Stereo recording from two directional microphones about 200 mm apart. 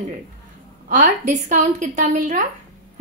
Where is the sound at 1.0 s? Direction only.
40° right (ahead or behind).